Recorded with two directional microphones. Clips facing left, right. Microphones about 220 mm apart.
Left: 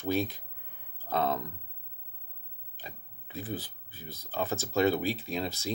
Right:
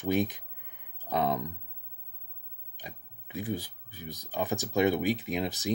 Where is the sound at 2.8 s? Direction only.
15° right (ahead or behind).